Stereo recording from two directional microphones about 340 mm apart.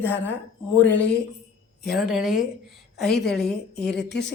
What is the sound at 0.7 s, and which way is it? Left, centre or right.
Speech, centre.